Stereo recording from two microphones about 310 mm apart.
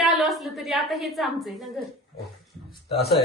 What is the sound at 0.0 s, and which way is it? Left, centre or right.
A woman's voice, centre.